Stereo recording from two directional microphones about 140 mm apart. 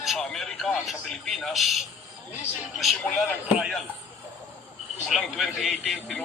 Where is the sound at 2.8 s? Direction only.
Centre (ahead or behind).